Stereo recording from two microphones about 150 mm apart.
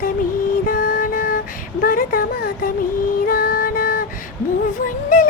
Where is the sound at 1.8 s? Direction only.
70° left (ahead or behind).